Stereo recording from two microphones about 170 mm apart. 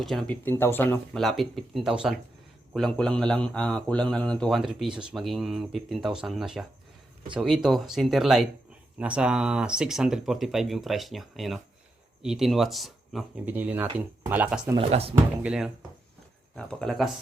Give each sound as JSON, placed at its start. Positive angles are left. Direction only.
{"t": 0.0, "sound": "speech", "side_deg": 0}
{"t": 1.2, "sound": "a man's voice", "side_deg": 0}
{"t": 14.8, "sound": "speech", "side_deg": -35}
{"t": 15.1, "sound": "a man's voice", "side_deg": -10}